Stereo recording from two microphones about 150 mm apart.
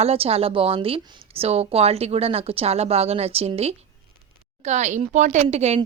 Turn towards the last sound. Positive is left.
turn(degrees=-45)  # may be behind; listen again after turning